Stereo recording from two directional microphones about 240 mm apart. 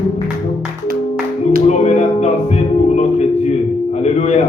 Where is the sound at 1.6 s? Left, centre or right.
Left.